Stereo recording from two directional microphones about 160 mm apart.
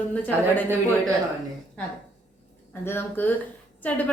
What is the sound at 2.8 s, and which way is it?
Speech, 15° left (ahead or behind).